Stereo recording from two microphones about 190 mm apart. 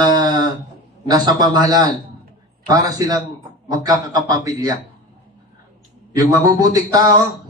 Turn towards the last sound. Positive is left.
turn(degrees=-20)  # may be behind; listen again after turning